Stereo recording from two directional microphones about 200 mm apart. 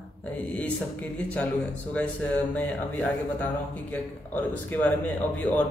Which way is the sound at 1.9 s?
5° left (ahead or behind).